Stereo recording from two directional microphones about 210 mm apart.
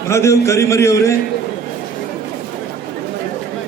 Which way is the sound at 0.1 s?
15° left (ahead or behind).